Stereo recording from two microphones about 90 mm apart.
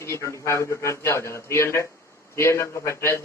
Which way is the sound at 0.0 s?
30° left (ahead or behind).